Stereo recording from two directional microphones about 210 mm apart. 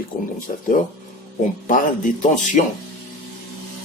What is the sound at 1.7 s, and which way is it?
Speech, 35° left (ahead or behind).